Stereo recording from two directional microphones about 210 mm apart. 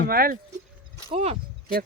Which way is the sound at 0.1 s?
45° right (ahead or behind).